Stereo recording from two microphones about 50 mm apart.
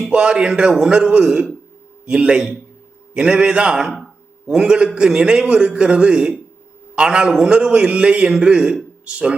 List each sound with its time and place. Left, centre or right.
0.1 s a man's voice: centre
3.9 s a sound: centre
4.5 s a man's voice: centre